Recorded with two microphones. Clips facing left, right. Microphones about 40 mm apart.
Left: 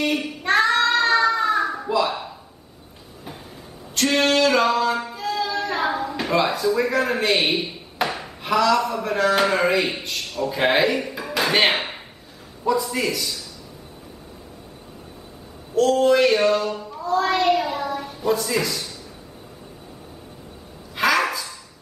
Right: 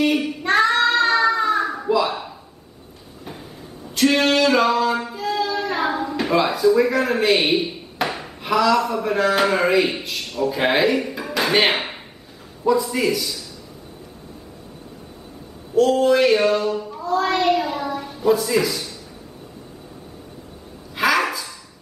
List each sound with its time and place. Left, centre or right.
0.0 s child singing: centre
3.9 s female singing: centre
12.6 s a man's voice: centre
15.7 s child singing: centre
20.9 s dog: centre